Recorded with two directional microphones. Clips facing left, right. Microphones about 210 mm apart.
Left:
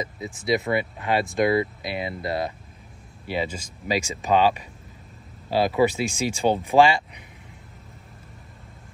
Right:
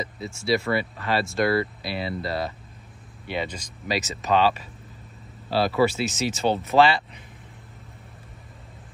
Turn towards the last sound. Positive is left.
turn(degrees=15)  # may be behind; listen again after turning